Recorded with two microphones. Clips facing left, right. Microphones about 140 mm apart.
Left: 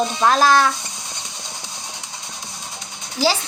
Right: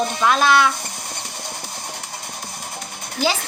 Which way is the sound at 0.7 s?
60° right (ahead or behind).